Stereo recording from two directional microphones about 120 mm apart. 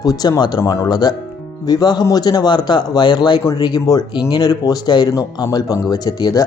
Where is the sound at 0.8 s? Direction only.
35° left (ahead or behind).